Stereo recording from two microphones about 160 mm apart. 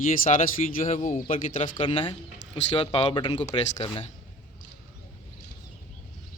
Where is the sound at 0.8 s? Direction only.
45° left (ahead or behind).